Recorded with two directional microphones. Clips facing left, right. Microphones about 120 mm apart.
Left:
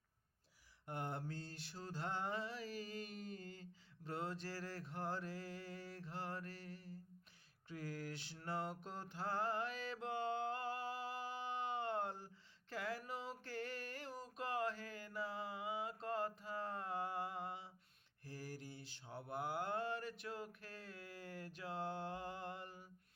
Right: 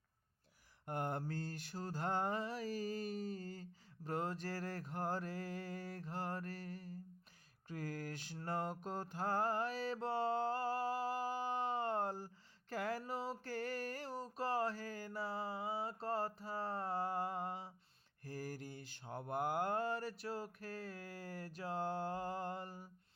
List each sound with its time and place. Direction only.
0.9 s mantra: 50° right (ahead or behind)
12.7 s a sound: 45° right (ahead or behind)
18.3 s mantra: 45° right (ahead or behind)